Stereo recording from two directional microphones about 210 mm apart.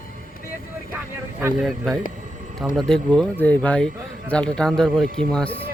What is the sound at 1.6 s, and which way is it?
Speech, centre (ahead or behind).